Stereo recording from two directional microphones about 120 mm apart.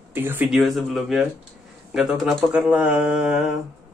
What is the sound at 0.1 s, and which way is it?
Speech, 15° right (ahead or behind).